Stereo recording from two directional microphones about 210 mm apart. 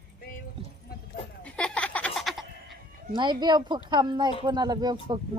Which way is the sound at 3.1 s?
20° right (ahead or behind).